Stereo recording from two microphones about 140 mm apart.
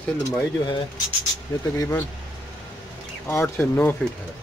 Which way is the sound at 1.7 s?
20° left (ahead or behind).